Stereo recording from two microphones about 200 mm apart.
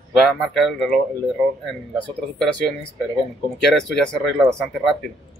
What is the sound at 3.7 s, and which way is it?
Speech, centre (ahead or behind).